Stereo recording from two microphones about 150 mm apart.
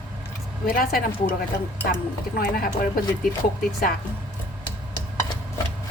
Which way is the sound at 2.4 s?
75° left (ahead or behind).